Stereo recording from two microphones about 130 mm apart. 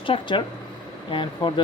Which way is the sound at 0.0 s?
40° left (ahead or behind).